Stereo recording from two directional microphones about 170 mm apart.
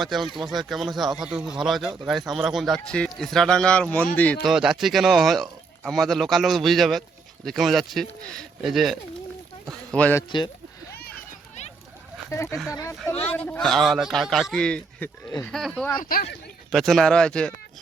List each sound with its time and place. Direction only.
0.0 s speech: centre (ahead or behind)
4.4 s speech: 5° right (ahead or behind)
9.9 s speech: 10° left (ahead or behind)
12.3 s speech: 15° left (ahead or behind)
16.0 s speech: 60° left (ahead or behind)
16.7 s speech: centre (ahead or behind)